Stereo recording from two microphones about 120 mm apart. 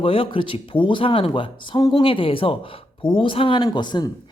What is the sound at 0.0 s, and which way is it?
Speech, 50° left (ahead or behind).